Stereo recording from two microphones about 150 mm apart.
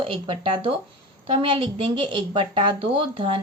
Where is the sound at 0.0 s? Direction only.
35° right (ahead or behind).